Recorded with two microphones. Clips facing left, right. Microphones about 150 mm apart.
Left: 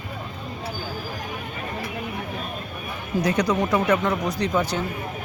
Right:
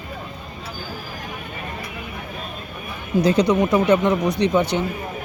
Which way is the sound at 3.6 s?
10° right (ahead or behind).